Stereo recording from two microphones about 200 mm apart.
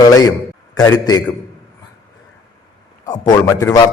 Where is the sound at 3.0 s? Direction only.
20° left (ahead or behind).